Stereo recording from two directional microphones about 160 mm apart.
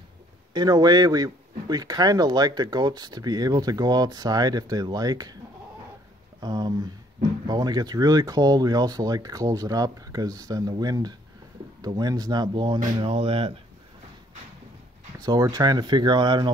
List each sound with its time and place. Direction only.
0.5 s speech: 25° right (ahead or behind)
6.4 s speech: 25° right (ahead or behind)
15.1 s speech: 25° right (ahead or behind)